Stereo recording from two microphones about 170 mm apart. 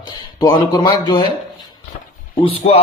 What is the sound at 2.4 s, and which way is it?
Speech, 35° left (ahead or behind).